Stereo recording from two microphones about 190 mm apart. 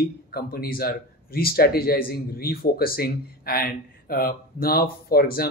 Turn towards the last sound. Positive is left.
turn(degrees=50)  # may be behind; listen again after turning